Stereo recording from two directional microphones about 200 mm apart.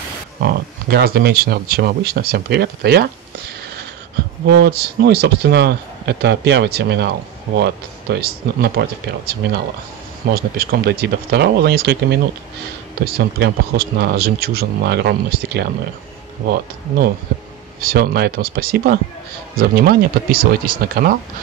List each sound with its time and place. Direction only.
0.4 s speech: 50° right (ahead or behind)
17.7 s speech: 50° right (ahead or behind)